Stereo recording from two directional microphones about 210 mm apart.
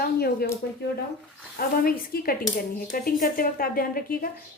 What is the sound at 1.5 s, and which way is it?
A woman's voice, 45° left (ahead or behind).